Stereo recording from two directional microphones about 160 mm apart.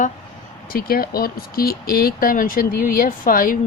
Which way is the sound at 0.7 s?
70° left (ahead or behind).